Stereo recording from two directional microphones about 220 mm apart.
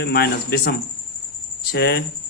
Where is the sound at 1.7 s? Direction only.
45° left (ahead or behind).